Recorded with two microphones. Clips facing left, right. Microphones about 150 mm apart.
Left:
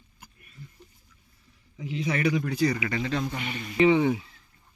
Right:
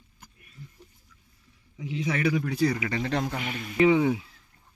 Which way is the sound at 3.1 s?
60° right (ahead or behind).